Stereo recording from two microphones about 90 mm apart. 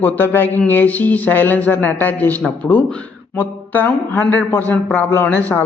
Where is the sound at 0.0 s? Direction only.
20° left (ahead or behind).